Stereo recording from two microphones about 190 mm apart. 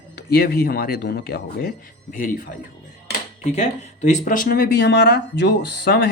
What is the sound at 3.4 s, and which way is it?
Speech, 35° left (ahead or behind).